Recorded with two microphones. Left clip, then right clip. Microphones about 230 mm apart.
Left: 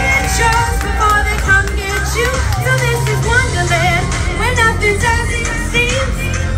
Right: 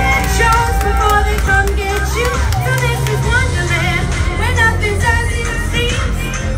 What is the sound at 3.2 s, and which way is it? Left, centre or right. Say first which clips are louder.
Music: left 3 dB; left.